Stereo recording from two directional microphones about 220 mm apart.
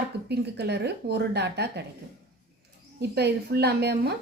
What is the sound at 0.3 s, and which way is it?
A woman's voice, 50° right (ahead or behind).